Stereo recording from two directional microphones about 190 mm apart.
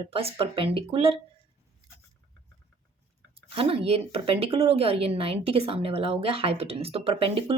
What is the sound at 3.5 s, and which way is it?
Speech, 30° right (ahead or behind).